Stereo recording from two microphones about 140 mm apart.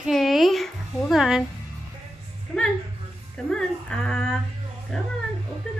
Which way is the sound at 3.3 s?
5° left (ahead or behind).